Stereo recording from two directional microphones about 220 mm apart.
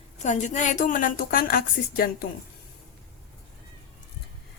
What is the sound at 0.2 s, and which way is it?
A woman's voice, 30° left (ahead or behind).